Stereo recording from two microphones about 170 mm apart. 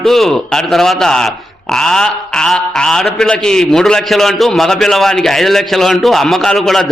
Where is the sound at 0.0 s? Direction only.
Centre (ahead or behind).